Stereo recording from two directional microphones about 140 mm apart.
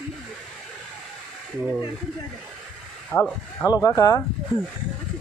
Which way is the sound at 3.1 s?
15° left (ahead or behind).